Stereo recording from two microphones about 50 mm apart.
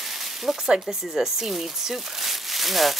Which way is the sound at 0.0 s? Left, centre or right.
Centre.